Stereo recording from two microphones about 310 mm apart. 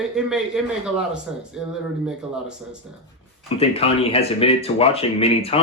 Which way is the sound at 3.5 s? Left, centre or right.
Centre.